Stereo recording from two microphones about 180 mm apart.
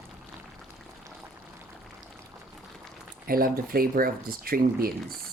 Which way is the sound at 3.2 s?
55° right (ahead or behind).